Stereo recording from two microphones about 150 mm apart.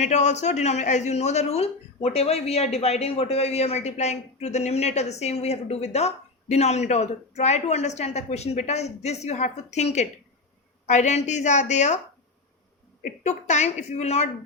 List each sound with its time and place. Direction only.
0.0 s speech: 50° left (ahead or behind)
13.0 s speech: 55° left (ahead or behind)